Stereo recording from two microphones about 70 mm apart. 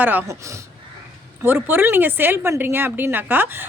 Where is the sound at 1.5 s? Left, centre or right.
Right.